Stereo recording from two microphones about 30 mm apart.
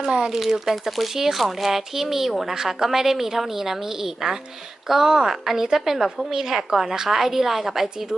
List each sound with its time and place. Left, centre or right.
0.0 s speech: right
0.3 s a woman's voice: centre
0.9 s a woman's voice: centre